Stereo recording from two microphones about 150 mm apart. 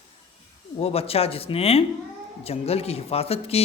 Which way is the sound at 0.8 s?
40° left (ahead or behind).